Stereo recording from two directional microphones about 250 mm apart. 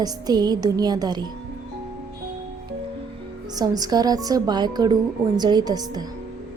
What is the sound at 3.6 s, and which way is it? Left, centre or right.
A woman's voice, centre.